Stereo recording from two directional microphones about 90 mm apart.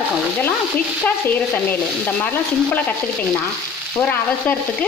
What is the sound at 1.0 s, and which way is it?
Stir, 20° left (ahead or behind).